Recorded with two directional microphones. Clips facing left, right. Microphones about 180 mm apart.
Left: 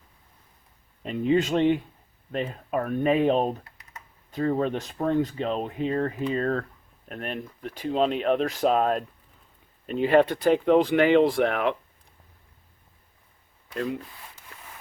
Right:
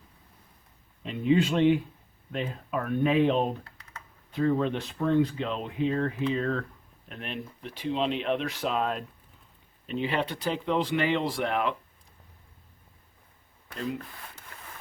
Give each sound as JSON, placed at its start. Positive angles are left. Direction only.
{"t": 1.0, "sound": "speech", "side_deg": 45}